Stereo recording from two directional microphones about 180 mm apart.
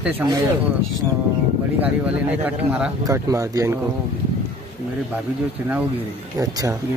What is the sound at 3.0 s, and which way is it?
Speech, 20° right (ahead or behind).